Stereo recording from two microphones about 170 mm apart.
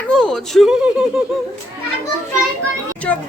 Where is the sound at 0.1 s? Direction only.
5° left (ahead or behind).